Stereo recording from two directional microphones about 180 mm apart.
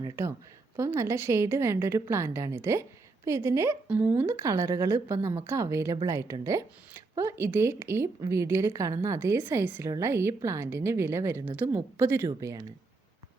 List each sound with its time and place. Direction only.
0.0 s a woman's voice: 15° right (ahead or behind)